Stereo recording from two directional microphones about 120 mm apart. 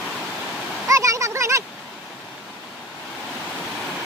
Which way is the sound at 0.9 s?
25° right (ahead or behind).